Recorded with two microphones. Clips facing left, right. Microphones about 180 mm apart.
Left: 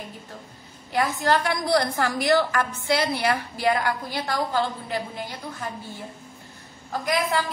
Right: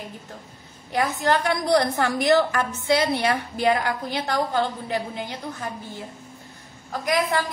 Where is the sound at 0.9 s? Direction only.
20° right (ahead or behind).